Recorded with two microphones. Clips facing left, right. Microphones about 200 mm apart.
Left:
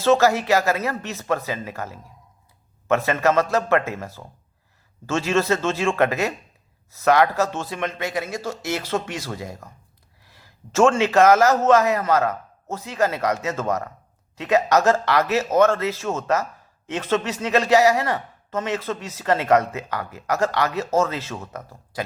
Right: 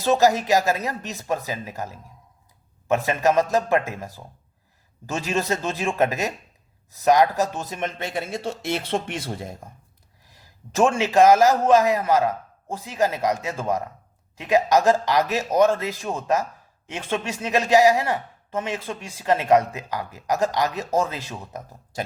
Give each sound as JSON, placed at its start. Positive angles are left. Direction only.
{"t": 0.0, "sound": "a man's voice", "side_deg": -15}
{"t": 8.1, "sound": "speech", "side_deg": -30}
{"t": 10.3, "sound": "a man's voice", "side_deg": -15}